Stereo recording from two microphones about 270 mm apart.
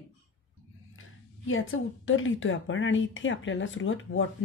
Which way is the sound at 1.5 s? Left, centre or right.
Left.